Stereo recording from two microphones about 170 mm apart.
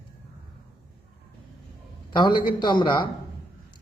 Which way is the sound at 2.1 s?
25° left (ahead or behind).